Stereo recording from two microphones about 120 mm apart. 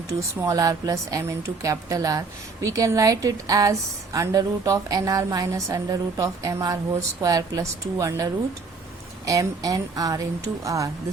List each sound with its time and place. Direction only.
0.1 s a woman's voice: 30° right (ahead or behind)